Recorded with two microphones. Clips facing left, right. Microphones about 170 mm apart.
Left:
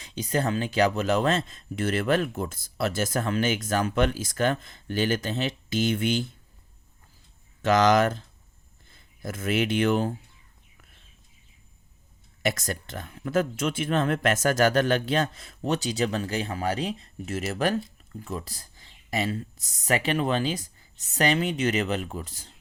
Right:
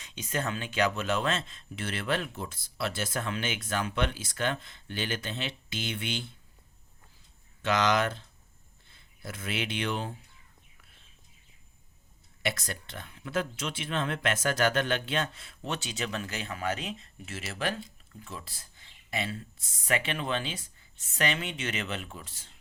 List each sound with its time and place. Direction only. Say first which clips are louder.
0.0 s speech: left 6 dB; 35° left (ahead or behind)
7.6 s speech: left 6 dB; 40° left (ahead or behind)
12.4 s speech: left 6 dB; 45° left (ahead or behind)